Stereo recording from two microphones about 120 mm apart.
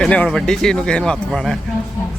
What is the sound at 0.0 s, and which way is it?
Speech, 5° left (ahead or behind).